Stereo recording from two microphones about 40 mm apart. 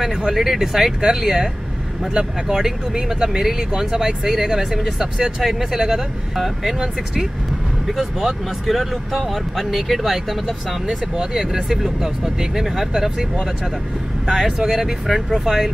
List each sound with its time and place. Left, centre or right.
0.3 s speech: centre
2.5 s speech: centre
14.7 s speech: centre